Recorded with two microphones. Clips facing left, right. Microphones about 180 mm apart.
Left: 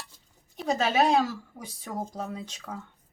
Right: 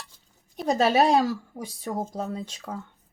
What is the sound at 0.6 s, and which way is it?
Speech, 35° right (ahead or behind).